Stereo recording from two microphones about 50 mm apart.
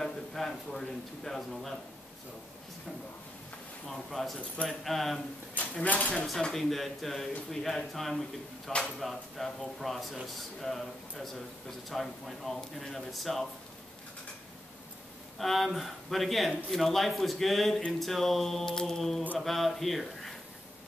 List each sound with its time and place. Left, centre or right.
0.0 s a man's voice: centre
3.8 s speech: centre
5.5 s speech: left
6.5 s speech: centre
15.3 s speech: centre